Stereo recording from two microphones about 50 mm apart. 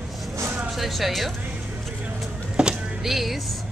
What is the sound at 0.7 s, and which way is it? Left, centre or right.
Speech, centre.